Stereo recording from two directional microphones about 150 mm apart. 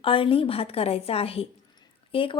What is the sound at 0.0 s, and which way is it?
A woman's voice, 35° left (ahead or behind).